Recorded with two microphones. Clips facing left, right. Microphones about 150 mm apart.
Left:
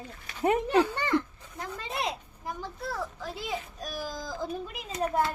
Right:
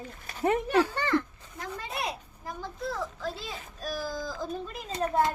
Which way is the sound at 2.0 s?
20° left (ahead or behind).